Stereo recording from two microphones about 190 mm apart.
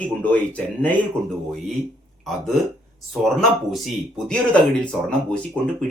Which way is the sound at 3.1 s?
Centre (ahead or behind).